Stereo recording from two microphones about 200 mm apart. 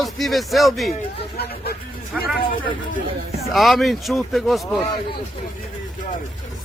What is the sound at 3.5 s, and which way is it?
Speech, centre (ahead or behind).